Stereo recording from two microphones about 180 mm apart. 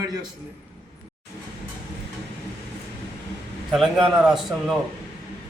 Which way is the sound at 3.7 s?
Centre (ahead or behind).